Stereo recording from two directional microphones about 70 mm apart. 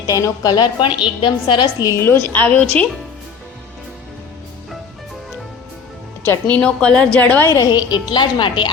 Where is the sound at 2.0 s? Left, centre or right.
Left.